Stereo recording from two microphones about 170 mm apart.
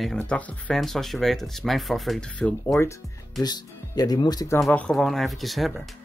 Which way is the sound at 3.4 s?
25° left (ahead or behind).